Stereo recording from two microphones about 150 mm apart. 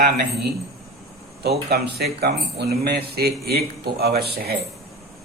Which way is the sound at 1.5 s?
90° right.